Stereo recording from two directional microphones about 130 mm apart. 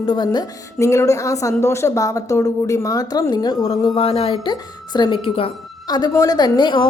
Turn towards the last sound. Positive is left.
turn(degrees=35)  # may be behind; listen again after turning